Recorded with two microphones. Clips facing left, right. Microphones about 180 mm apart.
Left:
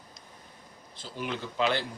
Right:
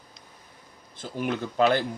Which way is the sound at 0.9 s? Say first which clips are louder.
Right 6 dB; 50° right (ahead or behind).